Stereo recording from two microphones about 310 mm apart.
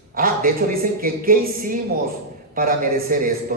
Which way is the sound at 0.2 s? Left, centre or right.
Right.